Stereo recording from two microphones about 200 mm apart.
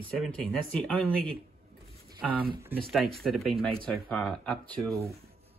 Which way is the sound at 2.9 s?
Centre (ahead or behind).